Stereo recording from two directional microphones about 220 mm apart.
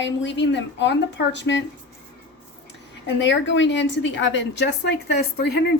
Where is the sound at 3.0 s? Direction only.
55° left (ahead or behind).